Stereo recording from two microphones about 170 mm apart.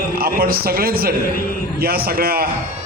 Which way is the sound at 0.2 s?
60° right (ahead or behind).